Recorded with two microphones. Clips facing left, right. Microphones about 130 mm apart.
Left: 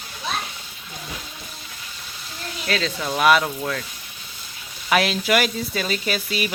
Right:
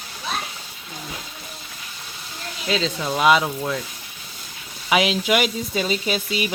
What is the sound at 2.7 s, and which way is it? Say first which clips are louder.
Speech: right 2 dB; 15° right (ahead or behind).